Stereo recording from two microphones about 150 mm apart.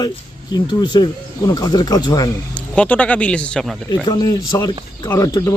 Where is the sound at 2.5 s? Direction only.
5° left (ahead or behind).